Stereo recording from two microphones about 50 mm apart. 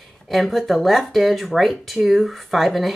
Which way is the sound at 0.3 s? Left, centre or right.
Centre.